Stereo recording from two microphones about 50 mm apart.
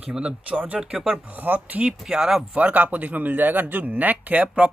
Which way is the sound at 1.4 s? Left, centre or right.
Right.